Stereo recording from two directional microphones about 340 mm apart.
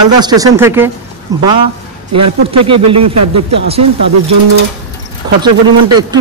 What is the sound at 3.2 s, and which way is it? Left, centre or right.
Speech, right.